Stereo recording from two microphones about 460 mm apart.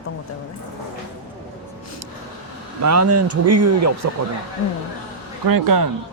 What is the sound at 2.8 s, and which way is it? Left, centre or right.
Speech, right.